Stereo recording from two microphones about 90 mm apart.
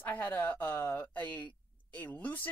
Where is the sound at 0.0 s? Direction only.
20° left (ahead or behind).